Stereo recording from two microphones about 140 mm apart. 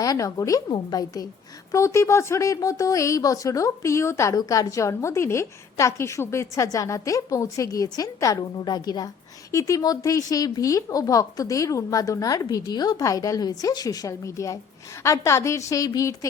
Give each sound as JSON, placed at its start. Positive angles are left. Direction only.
{"t": 0.0, "sound": "speech", "side_deg": 25}